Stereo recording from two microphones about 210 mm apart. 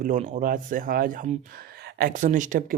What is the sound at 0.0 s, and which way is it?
Speech, 35° right (ahead or behind).